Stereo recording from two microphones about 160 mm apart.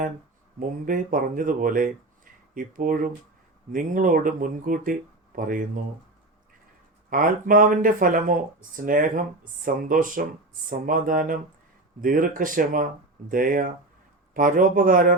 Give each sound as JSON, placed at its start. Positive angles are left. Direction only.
{"t": 0.9, "sound": "speech", "side_deg": -60}
{"t": 7.1, "sound": "speech", "side_deg": -60}